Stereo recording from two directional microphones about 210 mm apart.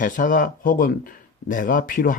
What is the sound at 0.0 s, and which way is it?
Speech, 40° left (ahead or behind).